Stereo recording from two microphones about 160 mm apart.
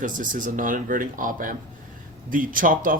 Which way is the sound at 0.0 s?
55° right (ahead or behind).